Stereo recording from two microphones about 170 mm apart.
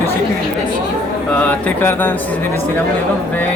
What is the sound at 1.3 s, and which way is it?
Mantra, 10° left (ahead or behind).